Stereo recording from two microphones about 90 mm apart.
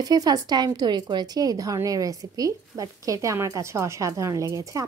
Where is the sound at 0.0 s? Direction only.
45° right (ahead or behind).